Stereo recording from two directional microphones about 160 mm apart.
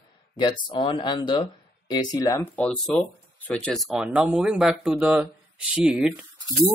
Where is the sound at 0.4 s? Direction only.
30° left (ahead or behind).